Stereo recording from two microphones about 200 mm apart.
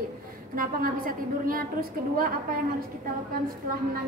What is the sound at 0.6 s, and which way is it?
A woman's voice, 45° right (ahead or behind).